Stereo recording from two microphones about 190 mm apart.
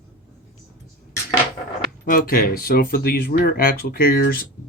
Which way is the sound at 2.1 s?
50° left (ahead or behind).